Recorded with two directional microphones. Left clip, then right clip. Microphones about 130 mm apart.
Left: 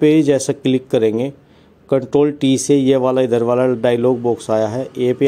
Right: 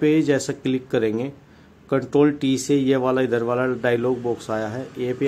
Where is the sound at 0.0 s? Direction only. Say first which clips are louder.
Left 6 dB; 40° left (ahead or behind).